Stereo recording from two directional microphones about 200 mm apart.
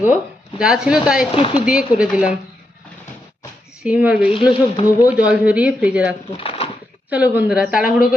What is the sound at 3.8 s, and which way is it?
Speech, 5° right (ahead or behind).